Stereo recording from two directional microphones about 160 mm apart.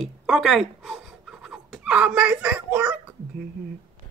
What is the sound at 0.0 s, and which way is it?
Pant, centre (ahead or behind).